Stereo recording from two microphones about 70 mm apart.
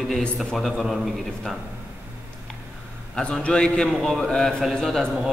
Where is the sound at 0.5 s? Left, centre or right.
Centre.